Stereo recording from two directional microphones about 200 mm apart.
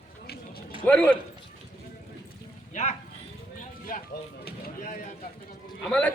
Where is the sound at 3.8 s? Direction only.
45° left (ahead or behind).